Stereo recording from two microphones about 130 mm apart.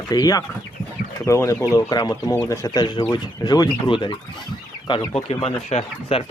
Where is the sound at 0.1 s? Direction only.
30° left (ahead or behind).